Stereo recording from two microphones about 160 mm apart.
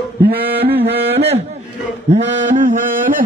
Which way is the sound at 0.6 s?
40° right (ahead or behind).